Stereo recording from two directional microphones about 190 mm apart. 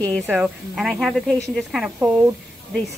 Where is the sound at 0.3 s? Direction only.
5° right (ahead or behind).